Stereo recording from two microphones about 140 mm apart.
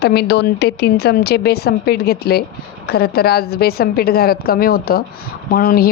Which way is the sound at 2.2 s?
90° left.